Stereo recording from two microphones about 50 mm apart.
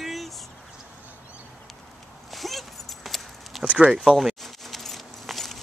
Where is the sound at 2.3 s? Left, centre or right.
Centre.